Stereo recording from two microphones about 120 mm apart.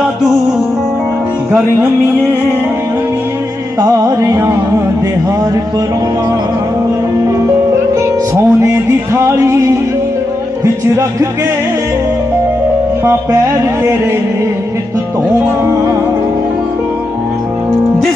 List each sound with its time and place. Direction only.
3.8 s music: 30° right (ahead or behind)
8.4 s music: 25° right (ahead or behind)
15.3 s music: 20° right (ahead or behind)